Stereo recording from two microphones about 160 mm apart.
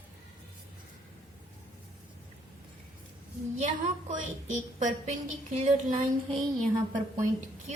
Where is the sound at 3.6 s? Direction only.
50° right (ahead or behind).